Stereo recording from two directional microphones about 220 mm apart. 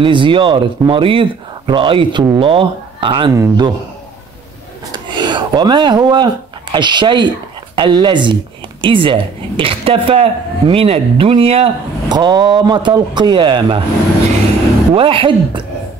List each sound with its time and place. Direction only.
0.0 s speech: 20° right (ahead or behind)
4.9 s speech: 20° right (ahead or behind)
15.0 s speech: 25° right (ahead or behind)